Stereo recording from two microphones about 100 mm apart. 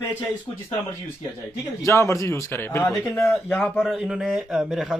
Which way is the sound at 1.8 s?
30° left (ahead or behind).